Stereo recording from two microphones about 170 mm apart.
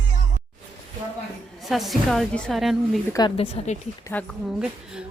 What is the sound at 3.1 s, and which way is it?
Speech, 25° left (ahead or behind).